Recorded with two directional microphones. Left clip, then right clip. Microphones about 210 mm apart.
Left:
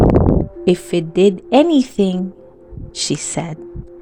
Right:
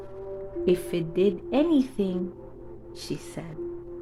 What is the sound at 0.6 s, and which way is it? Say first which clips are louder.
Speech: left 6 dB; 40° left (ahead or behind).